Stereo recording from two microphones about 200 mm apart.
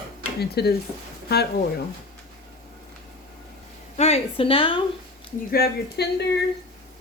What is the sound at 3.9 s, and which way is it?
Speech, 30° left (ahead or behind).